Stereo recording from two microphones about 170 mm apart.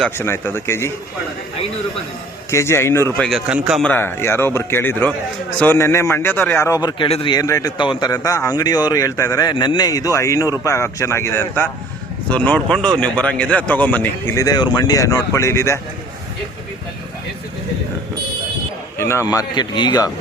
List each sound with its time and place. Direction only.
0.2 s speech: 15° left (ahead or behind)
2.5 s speech: 15° left (ahead or behind)
3.2 s speech: 5° right (ahead or behind)
3.8 s a man's voice: 10° left (ahead or behind)
18.9 s a man's voice: 15° left (ahead or behind)